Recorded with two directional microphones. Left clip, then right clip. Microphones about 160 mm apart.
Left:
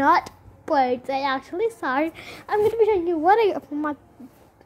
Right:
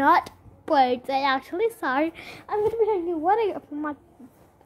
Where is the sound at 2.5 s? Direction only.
5° left (ahead or behind).